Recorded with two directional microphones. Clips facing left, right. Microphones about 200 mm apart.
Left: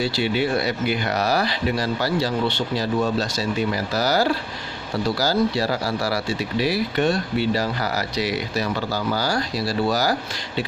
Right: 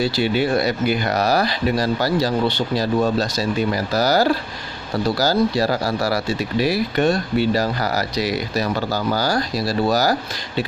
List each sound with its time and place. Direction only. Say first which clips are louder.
0.0 s speech: right 3 dB; 40° right (ahead or behind)